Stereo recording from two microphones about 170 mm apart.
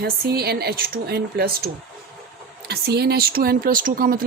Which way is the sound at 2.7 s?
70° right (ahead or behind).